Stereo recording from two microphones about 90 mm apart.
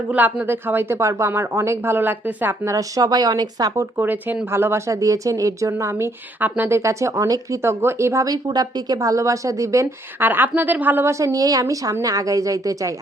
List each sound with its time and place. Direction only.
0.1 s speech: 15° right (ahead or behind)
2.6 s a woman's voice: 40° right (ahead or behind)
3.9 s speech: 20° right (ahead or behind); by 9.8 s 35° right (ahead or behind)
10.2 s speech: 20° right (ahead or behind)
11.3 s speech: 40° right (ahead or behind)